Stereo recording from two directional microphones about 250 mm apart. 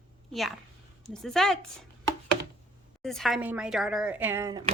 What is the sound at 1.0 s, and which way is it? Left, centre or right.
Speech, centre.